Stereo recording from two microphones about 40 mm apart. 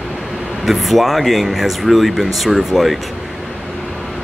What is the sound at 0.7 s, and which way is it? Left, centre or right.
Speech, centre.